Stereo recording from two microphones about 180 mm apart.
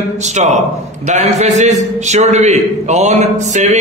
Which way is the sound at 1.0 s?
40° right (ahead or behind).